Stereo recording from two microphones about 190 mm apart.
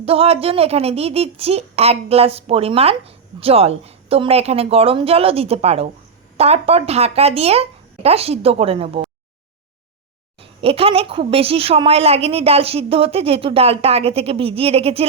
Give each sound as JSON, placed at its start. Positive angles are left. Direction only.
{"t": 0.0, "sound": "a woman's voice", "side_deg": -30}
{"t": 10.4, "sound": "a woman's voice", "side_deg": -30}